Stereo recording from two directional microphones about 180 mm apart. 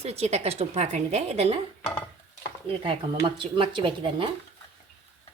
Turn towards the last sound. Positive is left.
turn(degrees=-30)  # may be behind; listen again after turning